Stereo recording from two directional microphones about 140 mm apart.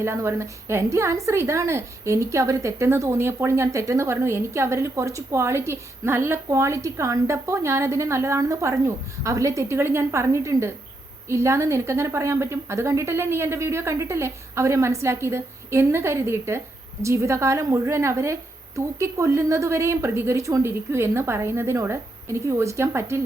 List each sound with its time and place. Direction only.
0.0 s a woman's voice: 20° right (ahead or behind)